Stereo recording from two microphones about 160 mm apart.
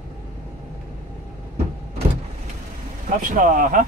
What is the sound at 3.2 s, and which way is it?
Speech, 55° right (ahead or behind).